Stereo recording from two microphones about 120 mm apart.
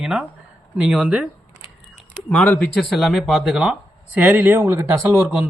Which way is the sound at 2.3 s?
10° left (ahead or behind).